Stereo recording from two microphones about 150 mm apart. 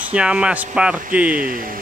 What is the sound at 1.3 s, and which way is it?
Speech, 65° right (ahead or behind).